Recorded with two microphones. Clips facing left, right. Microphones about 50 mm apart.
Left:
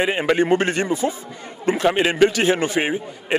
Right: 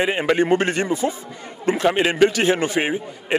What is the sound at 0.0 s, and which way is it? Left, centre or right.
Speech, left.